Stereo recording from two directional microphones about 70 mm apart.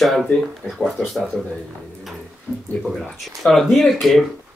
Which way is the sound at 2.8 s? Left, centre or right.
Centre.